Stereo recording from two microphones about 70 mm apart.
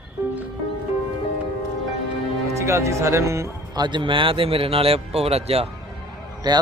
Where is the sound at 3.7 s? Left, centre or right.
Right.